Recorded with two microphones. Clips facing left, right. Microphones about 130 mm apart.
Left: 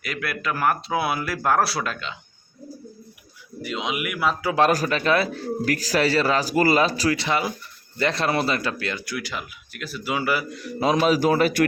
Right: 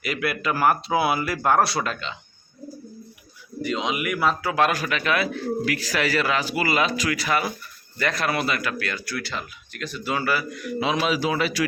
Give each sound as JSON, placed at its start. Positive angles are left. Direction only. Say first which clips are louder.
{"t": 0.0, "sound": "speech", "louder": "right 3 dB", "side_deg": -5}
{"t": 3.6, "sound": "speech", "louder": "right 2 dB", "side_deg": 5}
{"t": 4.5, "sound": "speech", "louder": "left 3 dB", "side_deg": 35}
{"t": 10.5, "sound": "speech", "louder": "left 3 dB", "side_deg": 30}